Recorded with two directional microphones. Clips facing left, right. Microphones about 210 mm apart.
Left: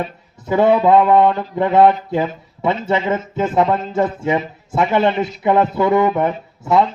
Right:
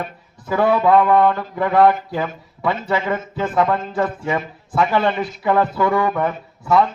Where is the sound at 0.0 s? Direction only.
20° left (ahead or behind).